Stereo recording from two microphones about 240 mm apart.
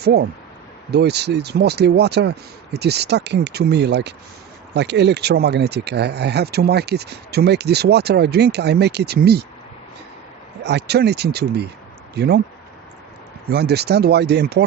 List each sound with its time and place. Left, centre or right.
0.0 s speech: right
10.6 s speech: right
13.5 s speech: right